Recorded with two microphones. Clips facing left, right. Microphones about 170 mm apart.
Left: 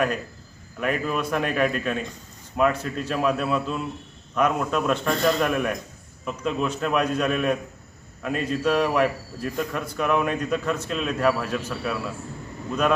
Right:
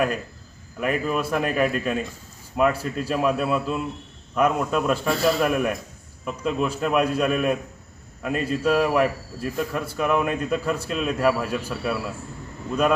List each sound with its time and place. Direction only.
0.8 s a man's voice: 5° right (ahead or behind)